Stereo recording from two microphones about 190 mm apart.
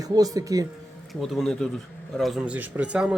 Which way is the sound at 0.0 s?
20° right (ahead or behind).